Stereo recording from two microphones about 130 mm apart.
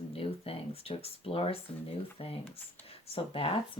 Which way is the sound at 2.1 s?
50° left (ahead or behind).